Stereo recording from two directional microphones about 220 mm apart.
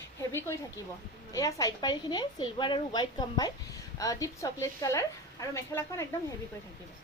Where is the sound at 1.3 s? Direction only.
15° left (ahead or behind).